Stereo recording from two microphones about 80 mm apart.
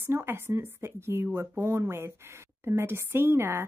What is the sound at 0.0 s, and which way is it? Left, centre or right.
A woman's voice, right.